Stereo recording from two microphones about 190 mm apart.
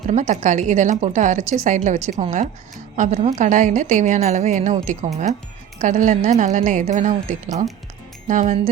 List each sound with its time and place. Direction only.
0.1 s a woman's voice: 40° right (ahead or behind)